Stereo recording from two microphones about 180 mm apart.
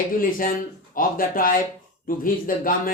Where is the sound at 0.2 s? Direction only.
50° left (ahead or behind).